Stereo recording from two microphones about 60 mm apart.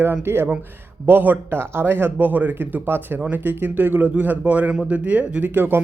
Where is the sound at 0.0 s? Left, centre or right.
Right.